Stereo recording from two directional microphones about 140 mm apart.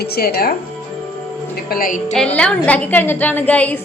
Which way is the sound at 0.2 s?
90° left.